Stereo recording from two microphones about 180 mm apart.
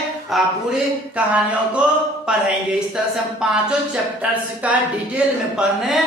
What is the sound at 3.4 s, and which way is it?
Speech, 5° right (ahead or behind).